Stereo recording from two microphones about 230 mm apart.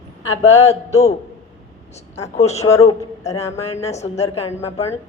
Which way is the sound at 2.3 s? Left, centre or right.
Left.